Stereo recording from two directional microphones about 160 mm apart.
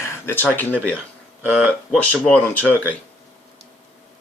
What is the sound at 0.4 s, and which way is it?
Speech, 10° left (ahead or behind).